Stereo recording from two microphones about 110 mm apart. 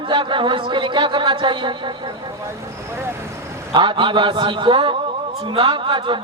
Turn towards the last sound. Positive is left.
turn(degrees=-50)  # may be behind; listen again after turning